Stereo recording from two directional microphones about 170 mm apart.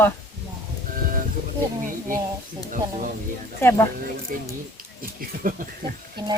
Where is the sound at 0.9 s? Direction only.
55° right (ahead or behind).